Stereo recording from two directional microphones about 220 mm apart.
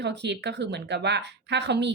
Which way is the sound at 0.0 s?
50° right (ahead or behind).